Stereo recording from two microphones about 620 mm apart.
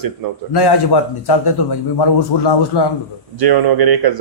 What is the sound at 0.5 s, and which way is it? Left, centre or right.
Speech, left.